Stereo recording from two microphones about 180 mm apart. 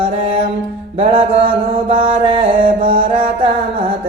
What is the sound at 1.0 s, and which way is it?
Mantra, 30° right (ahead or behind).